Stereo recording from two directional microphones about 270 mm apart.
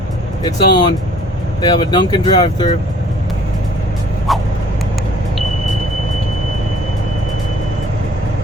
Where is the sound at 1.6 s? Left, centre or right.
Centre.